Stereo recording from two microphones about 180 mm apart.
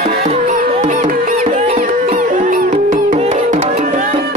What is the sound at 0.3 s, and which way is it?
Music, 40° right (ahead or behind).